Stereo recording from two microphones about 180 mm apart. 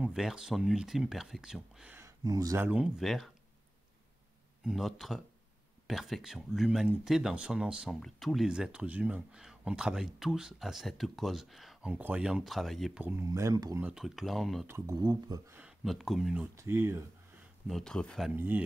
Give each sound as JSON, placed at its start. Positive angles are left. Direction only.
{"t": 0.0, "sound": "speech", "side_deg": -5}
{"t": 2.0, "sound": "speech", "side_deg": -15}
{"t": 4.6, "sound": "speech", "side_deg": 0}
{"t": 13.8, "sound": "speech", "side_deg": 0}
{"t": 14.7, "sound": "speech", "side_deg": -20}
{"t": 15.6, "sound": "speech", "side_deg": 0}
{"t": 16.5, "sound": "speech", "side_deg": -15}
{"t": 17.6, "sound": "speech", "side_deg": 0}
{"t": 18.3, "sound": "speech", "side_deg": -10}